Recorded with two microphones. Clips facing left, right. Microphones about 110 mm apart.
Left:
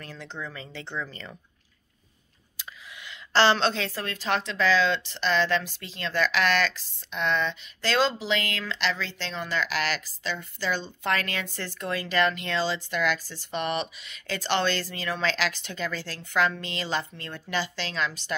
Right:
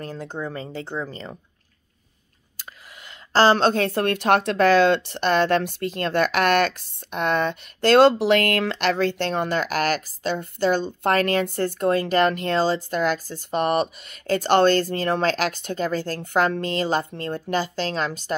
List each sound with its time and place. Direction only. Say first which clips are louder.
0.0 s speech: right 7 dB; 45° right (ahead or behind)
3.1 s a woman's voice: right 4 dB; 45° right (ahead or behind)